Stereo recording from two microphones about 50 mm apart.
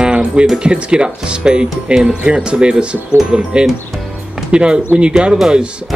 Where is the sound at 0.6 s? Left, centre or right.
Right.